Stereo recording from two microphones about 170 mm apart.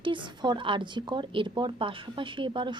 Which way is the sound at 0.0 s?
30° right (ahead or behind).